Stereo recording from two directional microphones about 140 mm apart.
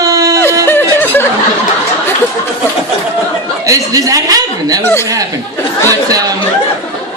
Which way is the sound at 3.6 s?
25° right (ahead or behind).